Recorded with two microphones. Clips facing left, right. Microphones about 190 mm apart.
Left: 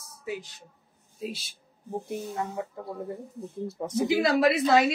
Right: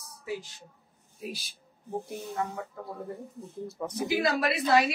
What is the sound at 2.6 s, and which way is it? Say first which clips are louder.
Speech: left 5 dB; 25° left (ahead or behind).